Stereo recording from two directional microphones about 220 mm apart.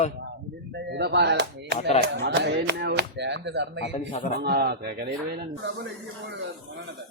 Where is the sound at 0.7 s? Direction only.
50° right (ahead or behind).